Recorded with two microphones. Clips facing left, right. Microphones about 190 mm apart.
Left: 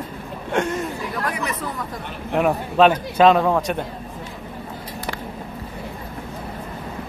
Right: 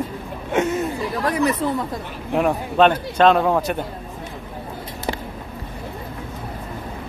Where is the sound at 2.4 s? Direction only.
Centre (ahead or behind).